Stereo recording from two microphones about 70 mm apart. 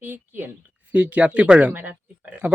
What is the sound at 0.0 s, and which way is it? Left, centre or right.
Speech, right.